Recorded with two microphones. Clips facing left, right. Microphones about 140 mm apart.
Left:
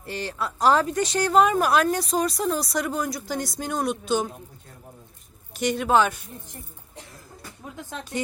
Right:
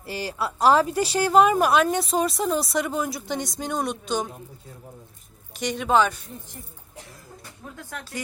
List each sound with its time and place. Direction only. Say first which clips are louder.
0.0 s a woman's voice: right 1 dB; 5° right (ahead or behind)
5.5 s speech: left 1 dB; 5° left (ahead or behind)
7.8 s speech: left 4 dB; 20° left (ahead or behind)